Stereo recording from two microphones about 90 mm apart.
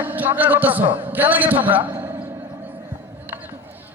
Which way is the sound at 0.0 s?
20° right (ahead or behind).